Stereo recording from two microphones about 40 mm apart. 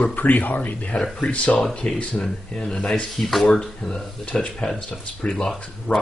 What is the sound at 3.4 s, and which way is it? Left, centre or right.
Speech, centre.